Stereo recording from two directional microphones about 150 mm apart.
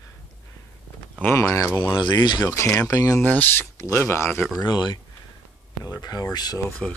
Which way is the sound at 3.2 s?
10° left (ahead or behind).